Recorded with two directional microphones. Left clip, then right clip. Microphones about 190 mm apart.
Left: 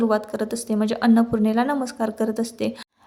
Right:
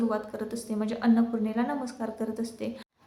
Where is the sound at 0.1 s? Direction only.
45° left (ahead or behind).